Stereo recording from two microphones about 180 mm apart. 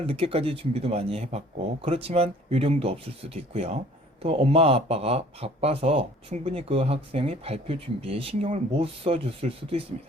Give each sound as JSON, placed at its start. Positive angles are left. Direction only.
{"t": 0.0, "sound": "speech", "side_deg": -30}